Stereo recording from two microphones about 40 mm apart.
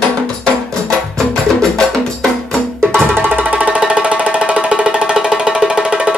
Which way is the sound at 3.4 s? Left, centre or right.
Right.